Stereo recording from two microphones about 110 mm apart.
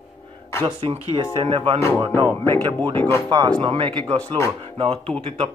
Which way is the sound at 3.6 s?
50° right (ahead or behind).